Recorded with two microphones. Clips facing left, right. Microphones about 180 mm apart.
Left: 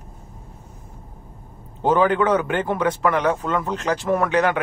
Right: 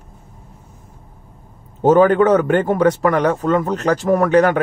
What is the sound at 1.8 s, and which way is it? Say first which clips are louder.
Speech: right 6 dB; 45° right (ahead or behind).